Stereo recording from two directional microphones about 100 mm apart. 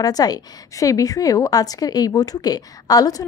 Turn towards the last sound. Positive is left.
turn(degrees=40)  # may be behind; listen again after turning